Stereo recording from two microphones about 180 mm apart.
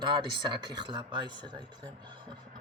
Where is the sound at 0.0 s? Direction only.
25° right (ahead or behind).